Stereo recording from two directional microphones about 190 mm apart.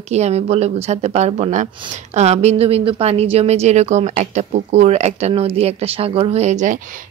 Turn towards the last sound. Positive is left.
turn(degrees=-40)  # may be behind; listen again after turning